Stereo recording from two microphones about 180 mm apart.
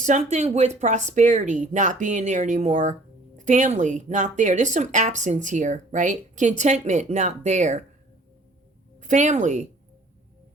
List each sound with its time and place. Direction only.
0.0 s speech: 40° right (ahead or behind)
9.0 s a woman's voice: 45° right (ahead or behind)